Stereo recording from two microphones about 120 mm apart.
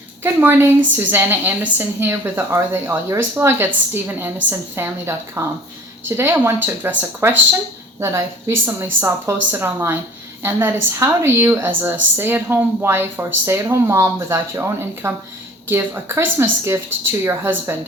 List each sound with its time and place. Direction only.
0.2 s a woman's voice: 20° right (ahead or behind)